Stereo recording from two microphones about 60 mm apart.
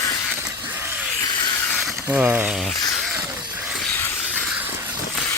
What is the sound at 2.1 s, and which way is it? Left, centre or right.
Speech, centre.